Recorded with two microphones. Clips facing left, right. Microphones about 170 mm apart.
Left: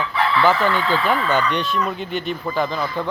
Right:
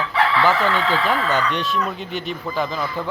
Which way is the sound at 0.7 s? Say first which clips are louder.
Even; 90° right.